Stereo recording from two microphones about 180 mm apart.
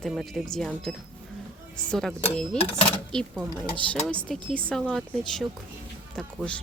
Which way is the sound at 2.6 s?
35° left (ahead or behind).